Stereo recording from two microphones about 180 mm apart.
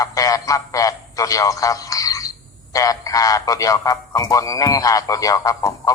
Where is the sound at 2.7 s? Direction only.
20° left (ahead or behind).